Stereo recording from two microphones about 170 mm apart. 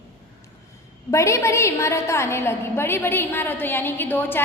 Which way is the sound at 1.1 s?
15° left (ahead or behind).